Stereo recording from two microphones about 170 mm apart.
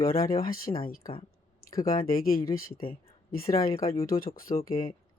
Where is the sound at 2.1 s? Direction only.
60° left (ahead or behind).